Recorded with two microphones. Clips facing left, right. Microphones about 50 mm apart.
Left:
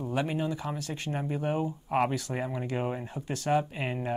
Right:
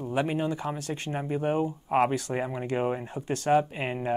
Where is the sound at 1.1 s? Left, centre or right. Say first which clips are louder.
Right 3 dB; centre.